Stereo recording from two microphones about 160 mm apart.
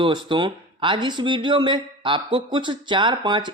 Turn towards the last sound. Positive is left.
turn(degrees=-30)  # may be behind; listen again after turning